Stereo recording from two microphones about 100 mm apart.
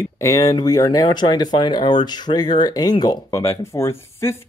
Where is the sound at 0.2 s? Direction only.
35° left (ahead or behind).